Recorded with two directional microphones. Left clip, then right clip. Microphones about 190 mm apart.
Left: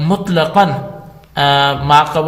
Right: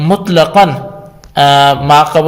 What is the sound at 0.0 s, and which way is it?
A man's voice, 25° right (ahead or behind).